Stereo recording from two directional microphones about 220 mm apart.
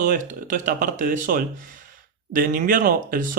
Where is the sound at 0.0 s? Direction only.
35° right (ahead or behind).